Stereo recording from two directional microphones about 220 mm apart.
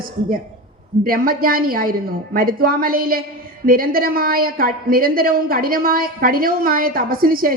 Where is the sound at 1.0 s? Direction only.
40° right (ahead or behind).